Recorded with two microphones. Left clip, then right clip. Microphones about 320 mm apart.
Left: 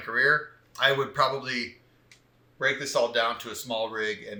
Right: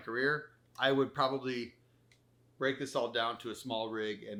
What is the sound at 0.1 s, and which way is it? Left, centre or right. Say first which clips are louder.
Speech: left 10 dB; left.